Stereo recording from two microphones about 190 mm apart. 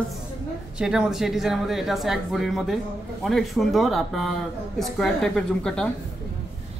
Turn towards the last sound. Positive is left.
turn(degrees=5)  # may be behind; listen again after turning